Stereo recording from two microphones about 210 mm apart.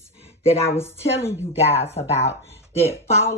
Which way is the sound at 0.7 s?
10° left (ahead or behind).